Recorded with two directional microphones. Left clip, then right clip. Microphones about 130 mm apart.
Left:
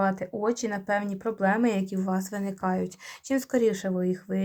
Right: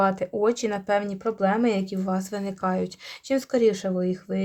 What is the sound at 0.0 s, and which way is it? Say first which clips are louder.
Speech: right 5 dB; 40° right (ahead or behind).